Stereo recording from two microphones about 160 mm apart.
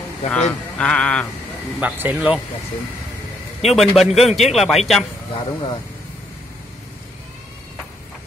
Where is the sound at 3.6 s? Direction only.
Centre (ahead or behind).